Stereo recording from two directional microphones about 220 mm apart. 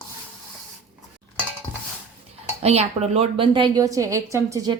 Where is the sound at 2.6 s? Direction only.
30° right (ahead or behind).